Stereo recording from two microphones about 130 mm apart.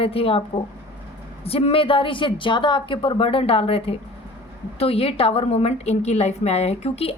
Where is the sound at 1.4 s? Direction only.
45° left (ahead or behind).